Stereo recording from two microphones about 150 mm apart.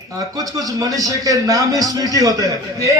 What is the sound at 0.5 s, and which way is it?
A man's voice, 25° right (ahead or behind).